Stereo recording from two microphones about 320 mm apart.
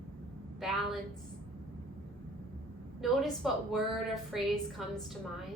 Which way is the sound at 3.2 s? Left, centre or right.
Centre.